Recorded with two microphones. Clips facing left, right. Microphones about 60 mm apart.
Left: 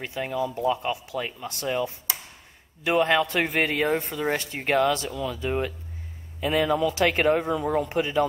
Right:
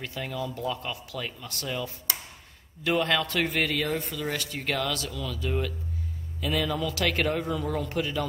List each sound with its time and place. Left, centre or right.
0.0 s speech: left